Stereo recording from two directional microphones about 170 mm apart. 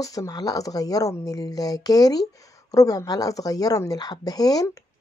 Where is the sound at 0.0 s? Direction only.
20° left (ahead or behind).